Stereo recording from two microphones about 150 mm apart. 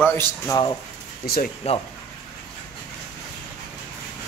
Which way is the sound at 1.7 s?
45° left (ahead or behind).